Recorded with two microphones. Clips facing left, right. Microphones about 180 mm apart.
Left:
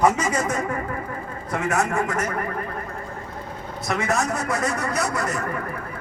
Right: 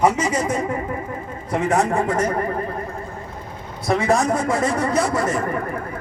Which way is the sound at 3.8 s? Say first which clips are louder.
Right 6 dB; 30° right (ahead or behind).